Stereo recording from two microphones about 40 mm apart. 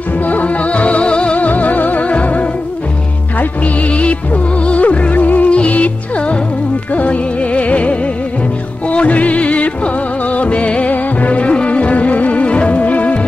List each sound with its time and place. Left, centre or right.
0.3 s music: left
1.4 s music: left